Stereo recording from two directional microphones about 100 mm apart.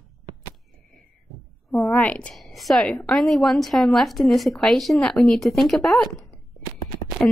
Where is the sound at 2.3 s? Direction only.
Centre (ahead or behind).